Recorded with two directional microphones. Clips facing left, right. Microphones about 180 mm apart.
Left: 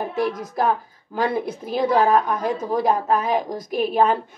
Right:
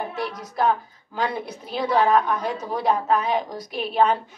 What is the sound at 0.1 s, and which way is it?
Speech, 50° left (ahead or behind).